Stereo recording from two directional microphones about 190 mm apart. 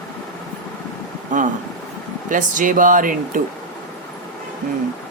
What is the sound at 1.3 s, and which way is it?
Speech, 45° right (ahead or behind).